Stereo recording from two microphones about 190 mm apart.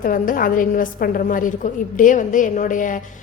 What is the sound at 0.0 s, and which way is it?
A woman's voice, 45° left (ahead or behind).